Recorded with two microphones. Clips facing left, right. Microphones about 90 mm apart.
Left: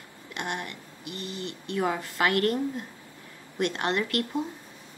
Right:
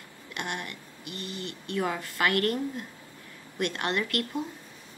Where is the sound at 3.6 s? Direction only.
20° left (ahead or behind).